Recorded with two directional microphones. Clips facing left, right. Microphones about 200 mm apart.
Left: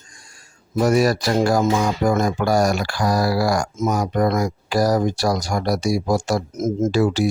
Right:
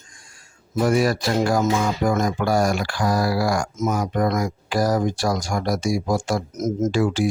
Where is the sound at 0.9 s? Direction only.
40° left (ahead or behind).